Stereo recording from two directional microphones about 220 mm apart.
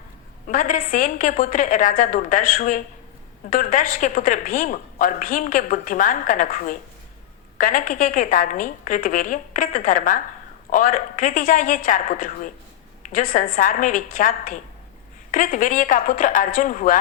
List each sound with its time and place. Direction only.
0.4 s a woman's voice: 40° left (ahead or behind)